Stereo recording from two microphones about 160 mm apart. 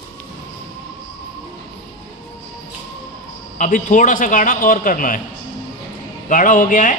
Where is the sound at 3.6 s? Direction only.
55° left (ahead or behind).